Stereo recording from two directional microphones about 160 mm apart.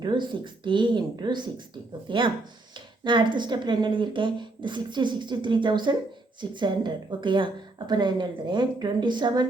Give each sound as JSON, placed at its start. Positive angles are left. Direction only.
{"t": 0.0, "sound": "speech", "side_deg": -30}